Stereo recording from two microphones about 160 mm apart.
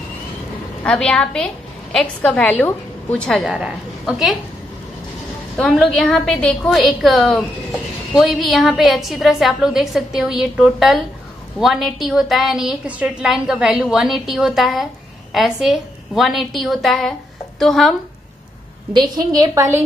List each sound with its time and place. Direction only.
0.8 s a woman's voice: 5° left (ahead or behind)
5.6 s a woman's voice: 5° left (ahead or behind)
19.0 s a woman's voice: 25° right (ahead or behind)